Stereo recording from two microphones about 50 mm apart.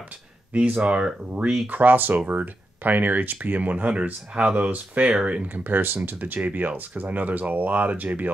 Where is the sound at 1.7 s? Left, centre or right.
Right.